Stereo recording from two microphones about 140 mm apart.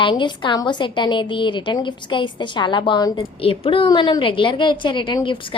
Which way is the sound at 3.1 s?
40° left (ahead or behind).